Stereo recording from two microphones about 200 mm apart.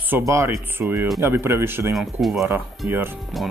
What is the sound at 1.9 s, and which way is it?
Speech, centre (ahead or behind).